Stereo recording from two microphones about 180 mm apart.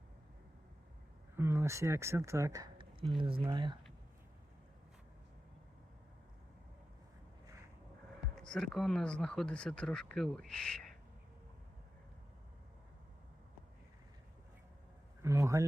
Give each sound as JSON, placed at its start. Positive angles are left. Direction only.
{"t": 1.4, "sound": "speech", "side_deg": -15}
{"t": 8.2, "sound": "speech", "side_deg": 5}
{"t": 15.2, "sound": "speech", "side_deg": -15}